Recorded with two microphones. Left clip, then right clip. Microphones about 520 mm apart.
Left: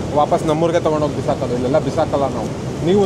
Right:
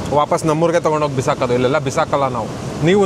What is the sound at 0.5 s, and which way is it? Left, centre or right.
Speech, right.